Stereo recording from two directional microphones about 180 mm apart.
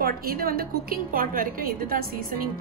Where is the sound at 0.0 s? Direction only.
55° right (ahead or behind).